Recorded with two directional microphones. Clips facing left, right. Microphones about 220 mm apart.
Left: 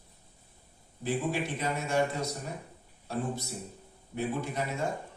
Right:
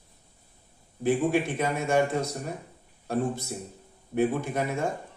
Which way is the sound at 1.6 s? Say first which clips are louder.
Right 5 dB; 55° right (ahead or behind).